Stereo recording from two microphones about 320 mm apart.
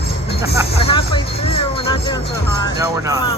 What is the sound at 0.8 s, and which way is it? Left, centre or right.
Music, centre.